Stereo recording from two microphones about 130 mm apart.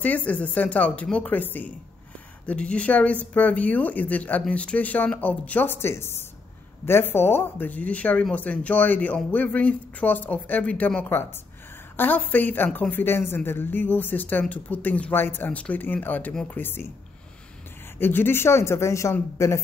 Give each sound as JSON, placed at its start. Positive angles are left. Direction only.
{"t": 0.0, "sound": "speech", "side_deg": 10}
{"t": 17.9, "sound": "speech", "side_deg": 15}